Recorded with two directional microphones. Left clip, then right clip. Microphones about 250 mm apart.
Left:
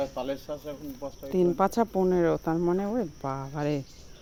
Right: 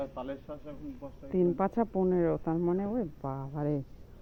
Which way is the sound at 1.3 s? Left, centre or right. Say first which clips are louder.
Left 4 dB; centre.